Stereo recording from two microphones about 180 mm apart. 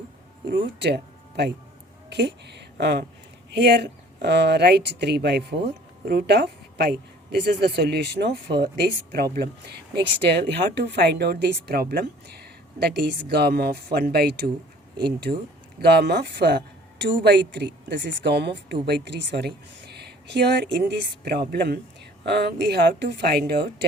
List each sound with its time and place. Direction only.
0.4 s a woman's voice: 70° right (ahead or behind)
15.8 s a woman's voice: 65° right (ahead or behind)